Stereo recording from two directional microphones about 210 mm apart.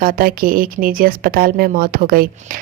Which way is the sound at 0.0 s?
40° right (ahead or behind).